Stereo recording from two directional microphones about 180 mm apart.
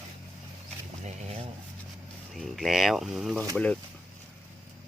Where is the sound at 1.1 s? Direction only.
35° right (ahead or behind).